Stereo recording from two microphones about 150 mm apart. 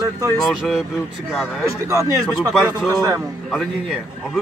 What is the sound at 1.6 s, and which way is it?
Speech, 20° right (ahead or behind).